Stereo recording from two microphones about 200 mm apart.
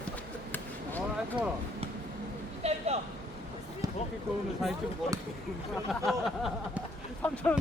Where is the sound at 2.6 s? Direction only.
30° right (ahead or behind).